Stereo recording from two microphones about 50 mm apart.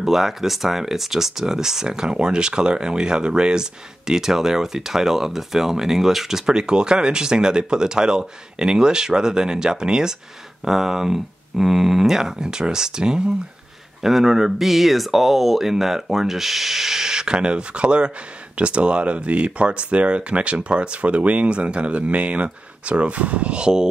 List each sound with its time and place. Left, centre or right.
0.0 s speech: centre